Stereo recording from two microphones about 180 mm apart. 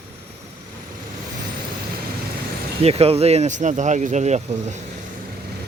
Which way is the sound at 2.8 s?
35° right (ahead or behind).